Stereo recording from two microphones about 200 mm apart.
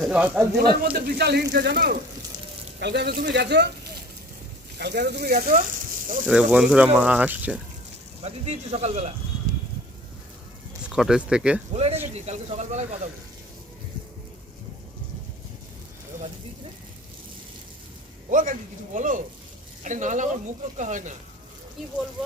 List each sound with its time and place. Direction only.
0.0 s speech: 5° right (ahead or behind)
0.5 s speech: 50° right (ahead or behind)
2.8 s speech: 60° right (ahead or behind)
4.8 s speech: 60° right (ahead or behind)
6.2 s speech: 5° right (ahead or behind)
8.2 s speech: 35° right (ahead or behind)
10.8 s speech: 5° right (ahead or behind)
11.7 s speech: 30° right (ahead or behind)
18.3 s speech: 40° right (ahead or behind)
21.8 s speech: centre (ahead or behind)